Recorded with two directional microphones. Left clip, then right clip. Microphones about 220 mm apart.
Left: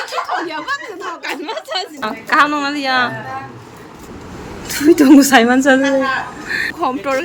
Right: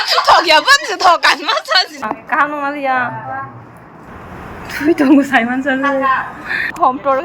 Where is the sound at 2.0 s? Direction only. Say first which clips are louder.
Left 2 dB; 20° left (ahead or behind).